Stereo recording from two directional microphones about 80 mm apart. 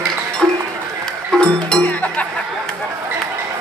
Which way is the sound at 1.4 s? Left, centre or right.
Centre.